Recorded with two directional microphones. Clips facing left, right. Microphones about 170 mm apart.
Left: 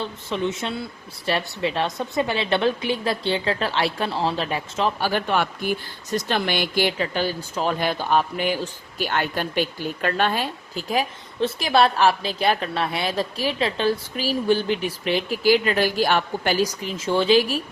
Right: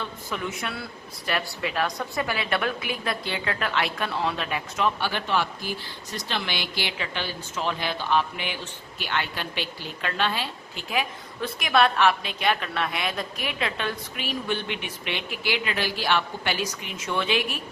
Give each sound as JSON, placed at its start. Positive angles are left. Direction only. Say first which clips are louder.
{"t": 0.0, "sound": "a woman's voice", "louder": "left 6 dB", "side_deg": 25}